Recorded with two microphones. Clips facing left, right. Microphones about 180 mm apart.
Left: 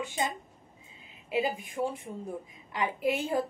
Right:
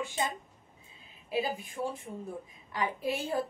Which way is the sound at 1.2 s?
20° left (ahead or behind).